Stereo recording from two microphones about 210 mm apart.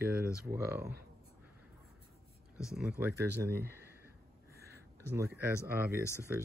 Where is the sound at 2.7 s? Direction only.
5° right (ahead or behind).